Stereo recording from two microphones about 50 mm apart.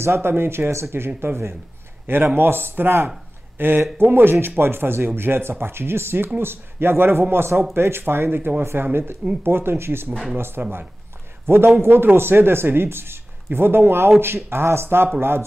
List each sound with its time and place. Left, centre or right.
0.0 s a man's voice: right